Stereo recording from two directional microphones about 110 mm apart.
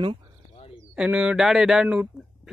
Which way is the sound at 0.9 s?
10° right (ahead or behind).